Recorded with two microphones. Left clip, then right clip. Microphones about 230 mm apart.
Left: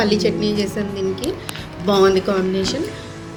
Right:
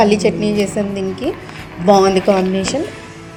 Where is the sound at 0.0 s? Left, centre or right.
Right.